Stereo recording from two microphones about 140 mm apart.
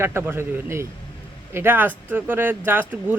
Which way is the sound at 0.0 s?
15° right (ahead or behind).